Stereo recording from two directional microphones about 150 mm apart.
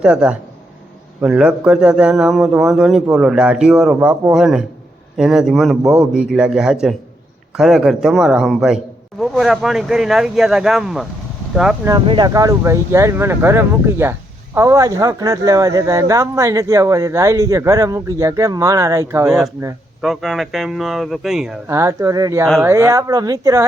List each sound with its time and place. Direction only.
0.0 s a man's voice: 5° right (ahead or behind)
11.9 s speech: 30° right (ahead or behind)
20.0 s a man's voice: centre (ahead or behind)
21.7 s speech: 20° right (ahead or behind)